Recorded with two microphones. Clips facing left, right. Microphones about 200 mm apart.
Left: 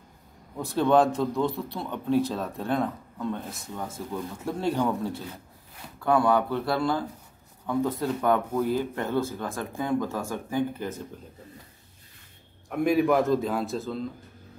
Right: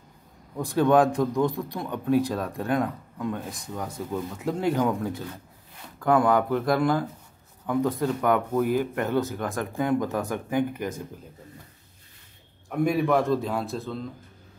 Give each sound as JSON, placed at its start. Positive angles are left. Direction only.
{"t": 0.6, "sound": "speech", "side_deg": -15}
{"t": 7.8, "sound": "speech", "side_deg": 20}
{"t": 8.3, "sound": "speech", "side_deg": -15}
{"t": 12.6, "sound": "a man's voice", "side_deg": 0}